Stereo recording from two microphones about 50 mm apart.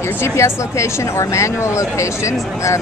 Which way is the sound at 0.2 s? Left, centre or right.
Left.